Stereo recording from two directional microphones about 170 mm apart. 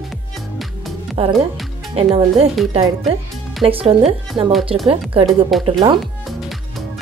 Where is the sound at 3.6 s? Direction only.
35° right (ahead or behind).